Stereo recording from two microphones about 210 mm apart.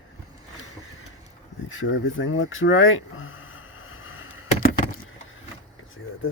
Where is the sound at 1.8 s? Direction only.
65° left (ahead or behind).